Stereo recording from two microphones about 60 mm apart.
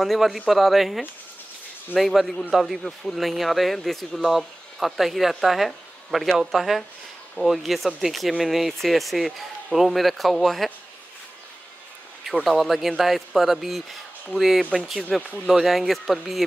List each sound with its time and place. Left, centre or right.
0.0 s speech: centre
12.4 s speech: centre
14.6 s speech: centre
15.3 s speech: centre